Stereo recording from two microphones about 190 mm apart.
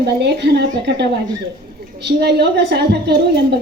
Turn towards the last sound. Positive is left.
turn(degrees=-60)  # may be behind; listen again after turning